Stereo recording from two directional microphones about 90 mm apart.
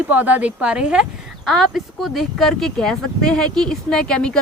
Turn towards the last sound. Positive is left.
turn(degrees=10)  # may be behind; listen again after turning